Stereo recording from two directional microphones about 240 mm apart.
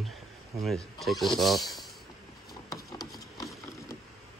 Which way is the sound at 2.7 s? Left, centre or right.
Centre.